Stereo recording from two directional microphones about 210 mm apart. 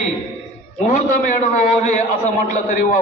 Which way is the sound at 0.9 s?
35° left (ahead or behind).